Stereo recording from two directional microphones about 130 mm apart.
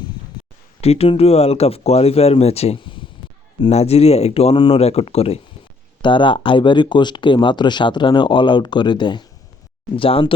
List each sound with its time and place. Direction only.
0.8 s speech: 50° left (ahead or behind)
3.7 s speech: 55° left (ahead or behind)
6.0 s speech: 40° left (ahead or behind)